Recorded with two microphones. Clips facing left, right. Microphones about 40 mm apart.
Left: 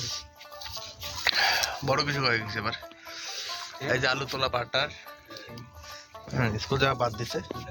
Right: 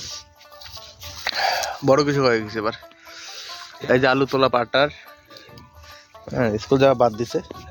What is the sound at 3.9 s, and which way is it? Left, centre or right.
Speech, right.